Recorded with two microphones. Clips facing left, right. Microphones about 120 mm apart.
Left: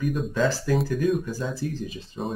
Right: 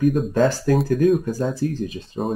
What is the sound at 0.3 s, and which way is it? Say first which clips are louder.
Speech: right 5 dB; 45° right (ahead or behind).